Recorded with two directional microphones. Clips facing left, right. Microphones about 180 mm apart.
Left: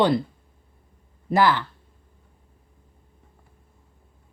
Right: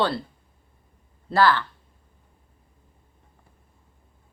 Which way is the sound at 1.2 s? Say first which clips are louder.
Even; 20° left (ahead or behind).